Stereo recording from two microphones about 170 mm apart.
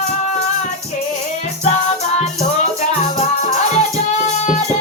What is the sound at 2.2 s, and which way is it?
Music, 40° left (ahead or behind).